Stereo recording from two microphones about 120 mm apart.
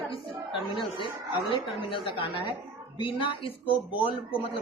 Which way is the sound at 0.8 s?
40° left (ahead or behind).